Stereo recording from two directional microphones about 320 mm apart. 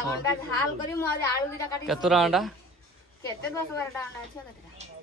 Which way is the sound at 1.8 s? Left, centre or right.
Centre.